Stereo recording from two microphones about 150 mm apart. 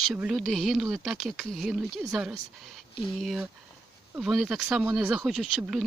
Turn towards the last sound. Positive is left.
turn(degrees=0)  # may be behind; listen again after turning